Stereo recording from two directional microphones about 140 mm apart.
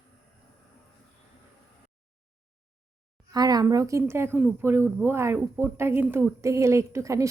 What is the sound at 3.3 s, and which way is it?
A woman's voice, 25° right (ahead or behind).